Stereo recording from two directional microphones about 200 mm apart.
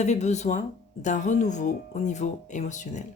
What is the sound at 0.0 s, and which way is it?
Speech, 35° left (ahead or behind).